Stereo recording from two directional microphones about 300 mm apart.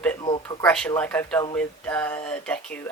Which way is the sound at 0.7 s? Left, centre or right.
Centre.